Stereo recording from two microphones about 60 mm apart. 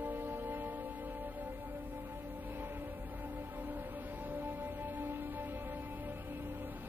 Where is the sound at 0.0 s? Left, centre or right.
Right.